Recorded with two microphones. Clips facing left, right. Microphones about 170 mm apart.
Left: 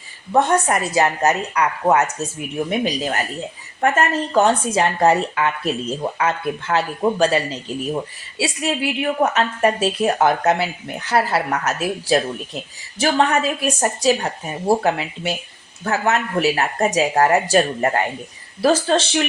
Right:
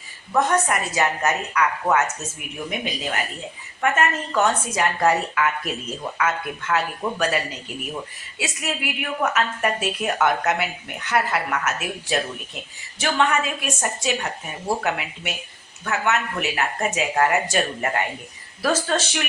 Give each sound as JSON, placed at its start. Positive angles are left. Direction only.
{"t": 0.3, "sound": "speech", "side_deg": 30}